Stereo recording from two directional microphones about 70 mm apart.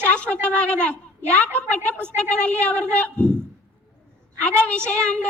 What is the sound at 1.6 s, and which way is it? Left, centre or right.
A woman's voice, left.